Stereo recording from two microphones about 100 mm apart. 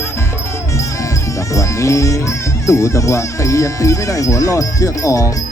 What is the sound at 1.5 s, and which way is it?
Music, 30° left (ahead or behind).